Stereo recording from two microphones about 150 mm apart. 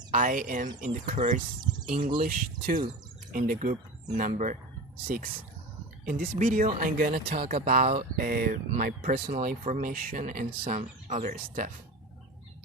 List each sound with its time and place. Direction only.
0.1 s speech: 60° right (ahead or behind)
5.0 s speech: 70° right (ahead or behind)
7.3 s speech: 45° right (ahead or behind)
8.1 s speech: 75° right (ahead or behind)
9.3 s speech: 60° right (ahead or behind)